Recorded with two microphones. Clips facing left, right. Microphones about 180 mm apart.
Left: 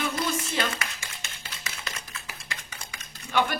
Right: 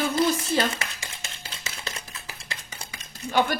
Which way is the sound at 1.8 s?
30° right (ahead or behind).